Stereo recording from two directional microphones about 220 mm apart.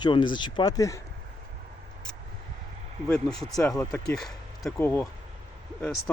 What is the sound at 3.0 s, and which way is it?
Speech, 5° left (ahead or behind).